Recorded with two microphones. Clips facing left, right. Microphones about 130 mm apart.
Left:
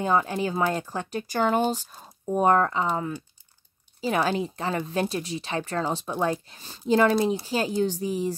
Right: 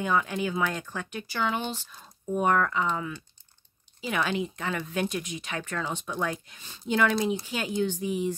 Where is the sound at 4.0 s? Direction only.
35° left (ahead or behind).